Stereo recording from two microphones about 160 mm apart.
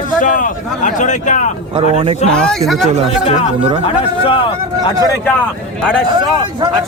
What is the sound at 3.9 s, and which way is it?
Speech, 35° left (ahead or behind).